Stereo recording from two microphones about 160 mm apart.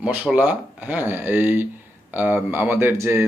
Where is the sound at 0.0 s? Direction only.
10° right (ahead or behind).